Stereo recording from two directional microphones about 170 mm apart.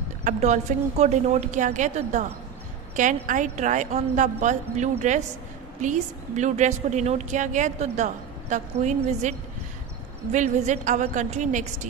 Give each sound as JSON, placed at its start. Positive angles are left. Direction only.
{"t": 0.2, "sound": "a woman's voice", "side_deg": -45}
{"t": 10.3, "sound": "a woman's voice", "side_deg": -45}